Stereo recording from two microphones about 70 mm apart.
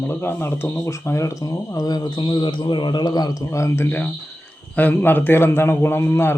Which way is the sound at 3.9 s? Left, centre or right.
Left.